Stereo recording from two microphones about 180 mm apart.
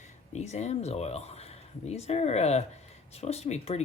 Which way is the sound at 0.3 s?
40° left (ahead or behind).